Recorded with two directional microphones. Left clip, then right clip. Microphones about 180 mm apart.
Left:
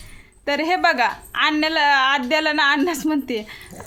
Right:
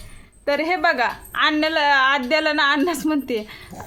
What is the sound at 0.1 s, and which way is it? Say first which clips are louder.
A woman's voice: right 1 dB; 15° left (ahead or behind).